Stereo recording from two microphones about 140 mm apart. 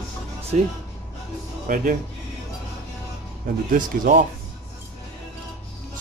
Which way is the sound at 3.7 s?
75° right (ahead or behind).